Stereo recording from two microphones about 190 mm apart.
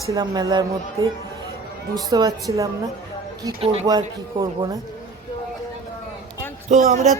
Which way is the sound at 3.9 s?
20° right (ahead or behind).